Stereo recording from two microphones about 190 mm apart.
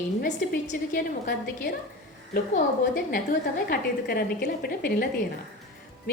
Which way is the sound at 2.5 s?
45° left (ahead or behind).